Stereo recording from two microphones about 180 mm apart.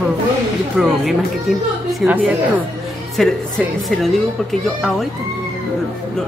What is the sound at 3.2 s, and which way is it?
Speech, centre (ahead or behind).